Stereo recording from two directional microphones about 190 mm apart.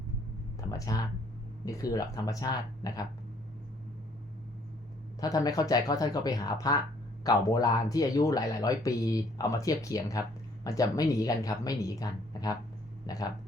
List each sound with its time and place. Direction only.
0.7 s a sound: 20° left (ahead or behind)
1.6 s speech: 20° left (ahead or behind)
5.2 s speech: 20° left (ahead or behind)